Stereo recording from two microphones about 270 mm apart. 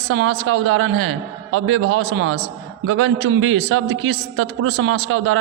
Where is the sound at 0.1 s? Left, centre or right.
Right.